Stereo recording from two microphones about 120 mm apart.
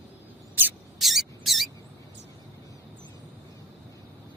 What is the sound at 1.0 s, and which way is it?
Mouse, centre (ahead or behind).